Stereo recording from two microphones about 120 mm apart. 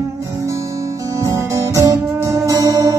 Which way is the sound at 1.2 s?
25° right (ahead or behind).